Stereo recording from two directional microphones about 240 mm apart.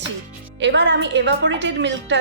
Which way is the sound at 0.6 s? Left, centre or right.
Right.